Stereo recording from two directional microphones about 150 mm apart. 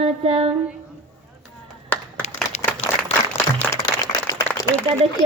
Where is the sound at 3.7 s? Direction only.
25° left (ahead or behind).